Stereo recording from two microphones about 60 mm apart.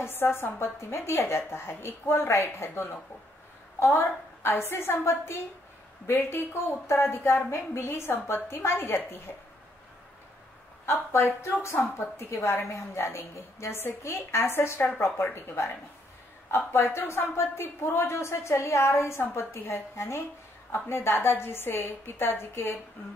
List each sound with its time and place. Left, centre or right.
0.0 s a woman's voice: left
10.9 s a woman's voice: left